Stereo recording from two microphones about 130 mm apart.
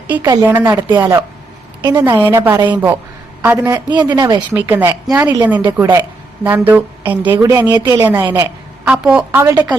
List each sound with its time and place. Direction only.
0.4 s a woman's voice: 20° right (ahead or behind)
2.0 s a woman's voice: 15° right (ahead or behind)
2.6 s speech: 35° right (ahead or behind)
3.4 s a woman's voice: 15° right (ahead or behind)
3.8 s speech: 30° right (ahead or behind)
4.5 s a woman's voice: 15° right (ahead or behind)
7.4 s a woman's voice: 25° right (ahead or behind)
8.9 s a woman's voice: 10° right (ahead or behind)
9.4 s a woman's voice: 20° right (ahead or behind)